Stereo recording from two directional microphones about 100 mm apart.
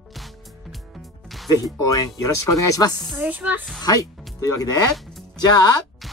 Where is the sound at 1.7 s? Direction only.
40° left (ahead or behind).